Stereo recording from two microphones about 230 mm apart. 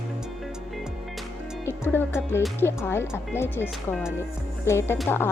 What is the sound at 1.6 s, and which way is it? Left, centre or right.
Speech, centre.